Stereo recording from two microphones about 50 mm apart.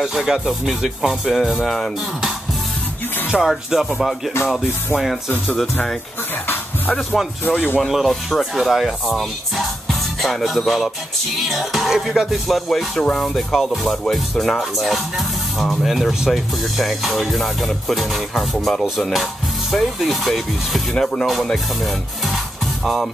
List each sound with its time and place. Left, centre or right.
0.0 s speech: centre
3.3 s speech: centre
7.4 s speech: left
7.8 s speech: centre